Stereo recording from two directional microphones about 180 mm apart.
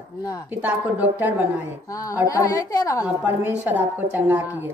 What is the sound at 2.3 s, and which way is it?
Speech, 20° left (ahead or behind).